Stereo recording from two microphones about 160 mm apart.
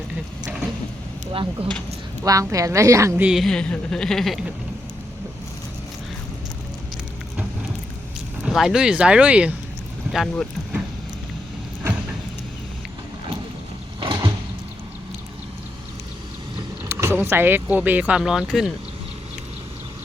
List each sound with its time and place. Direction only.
1.6 s speech: 35° right (ahead or behind)
2.2 s a woman's voice: 20° right (ahead or behind)
3.2 s speech: centre (ahead or behind)
8.4 s speech: 5° right (ahead or behind)
14.0 s a sound: 25° right (ahead or behind)
16.9 s speech: 15° right (ahead or behind)